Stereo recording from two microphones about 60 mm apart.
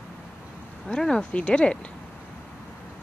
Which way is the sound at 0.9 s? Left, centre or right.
Centre.